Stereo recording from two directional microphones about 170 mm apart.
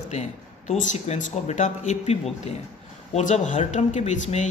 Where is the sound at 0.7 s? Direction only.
40° left (ahead or behind).